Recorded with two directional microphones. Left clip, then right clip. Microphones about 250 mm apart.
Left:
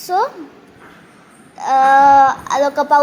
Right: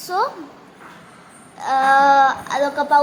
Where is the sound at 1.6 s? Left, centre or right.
Centre.